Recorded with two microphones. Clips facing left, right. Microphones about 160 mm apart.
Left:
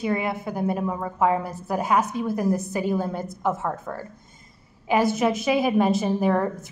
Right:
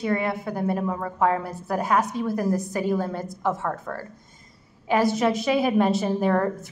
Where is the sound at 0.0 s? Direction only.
10° left (ahead or behind).